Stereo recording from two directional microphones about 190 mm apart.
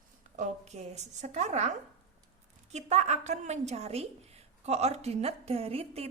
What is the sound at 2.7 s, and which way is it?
A woman's voice, 35° right (ahead or behind).